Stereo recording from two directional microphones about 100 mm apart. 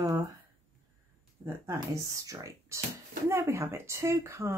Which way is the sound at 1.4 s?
30° right (ahead or behind).